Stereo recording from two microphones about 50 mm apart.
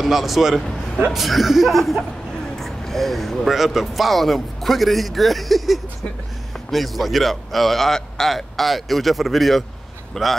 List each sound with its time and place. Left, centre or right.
0.0 s a man's voice: centre